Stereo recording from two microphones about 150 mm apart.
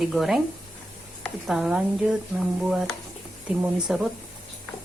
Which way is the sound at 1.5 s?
5° right (ahead or behind).